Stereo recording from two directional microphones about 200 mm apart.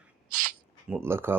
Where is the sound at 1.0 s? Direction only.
10° right (ahead or behind).